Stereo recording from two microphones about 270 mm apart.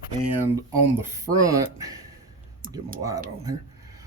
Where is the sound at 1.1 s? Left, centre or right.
Centre.